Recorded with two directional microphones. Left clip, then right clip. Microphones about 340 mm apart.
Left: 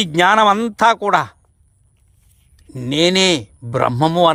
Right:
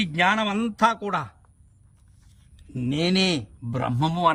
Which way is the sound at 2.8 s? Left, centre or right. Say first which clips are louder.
Left 9 dB; centre.